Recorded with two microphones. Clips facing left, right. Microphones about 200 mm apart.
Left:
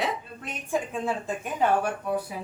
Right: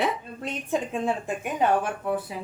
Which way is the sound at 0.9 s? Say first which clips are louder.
Right 2 dB; 15° right (ahead or behind).